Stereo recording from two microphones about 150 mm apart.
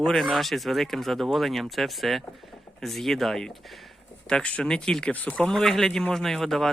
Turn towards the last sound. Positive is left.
turn(degrees=0)  # may be behind; listen again after turning